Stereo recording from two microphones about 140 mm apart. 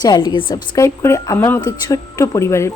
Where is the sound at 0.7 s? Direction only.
20° left (ahead or behind).